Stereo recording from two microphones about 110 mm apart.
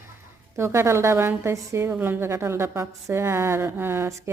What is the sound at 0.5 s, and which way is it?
A woman's voice, 25° right (ahead or behind).